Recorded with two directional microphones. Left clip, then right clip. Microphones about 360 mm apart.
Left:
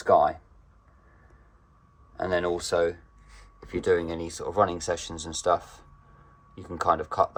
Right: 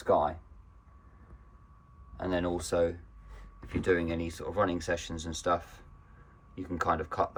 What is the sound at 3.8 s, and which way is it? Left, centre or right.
Speech, centre.